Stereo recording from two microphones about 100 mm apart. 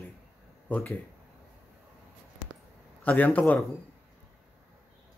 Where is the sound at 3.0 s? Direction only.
15° left (ahead or behind).